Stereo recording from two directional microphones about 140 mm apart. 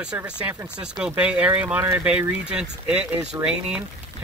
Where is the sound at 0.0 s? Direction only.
5° right (ahead or behind).